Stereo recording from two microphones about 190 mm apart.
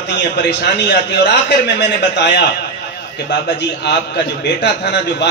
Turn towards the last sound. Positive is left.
turn(degrees=65)  # may be behind; listen again after turning